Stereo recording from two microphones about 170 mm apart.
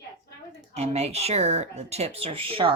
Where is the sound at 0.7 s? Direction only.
40° right (ahead or behind).